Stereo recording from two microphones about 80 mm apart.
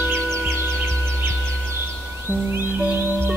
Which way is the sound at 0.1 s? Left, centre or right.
Right.